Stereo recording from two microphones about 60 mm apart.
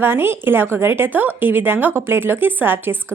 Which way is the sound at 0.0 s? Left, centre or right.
Right.